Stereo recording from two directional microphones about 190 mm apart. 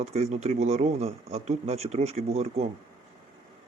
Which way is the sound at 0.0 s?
35° right (ahead or behind).